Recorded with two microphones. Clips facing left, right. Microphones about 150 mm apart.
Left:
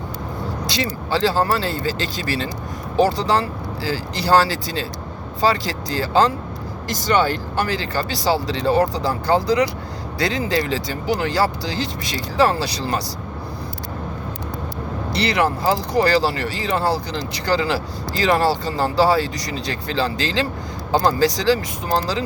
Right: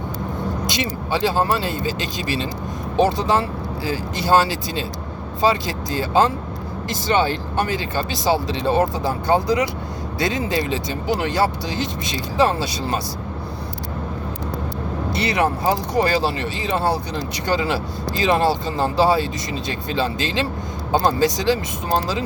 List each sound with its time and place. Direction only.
0.7 s speech: 20° right (ahead or behind)
15.1 s speech: 25° right (ahead or behind)